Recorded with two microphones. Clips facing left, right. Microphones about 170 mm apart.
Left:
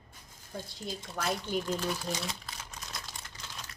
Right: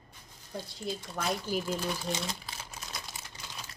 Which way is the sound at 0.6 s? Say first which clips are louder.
Right 3 dB; centre (ahead or behind).